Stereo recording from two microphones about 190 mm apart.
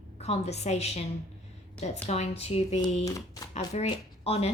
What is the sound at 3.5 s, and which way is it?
Speech, 35° left (ahead or behind).